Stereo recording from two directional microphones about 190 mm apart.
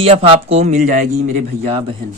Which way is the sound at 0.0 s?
30° right (ahead or behind).